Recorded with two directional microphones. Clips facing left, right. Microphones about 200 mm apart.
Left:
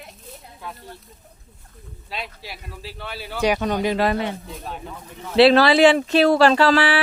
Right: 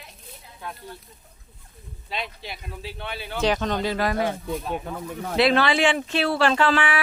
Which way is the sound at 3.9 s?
25° left (ahead or behind).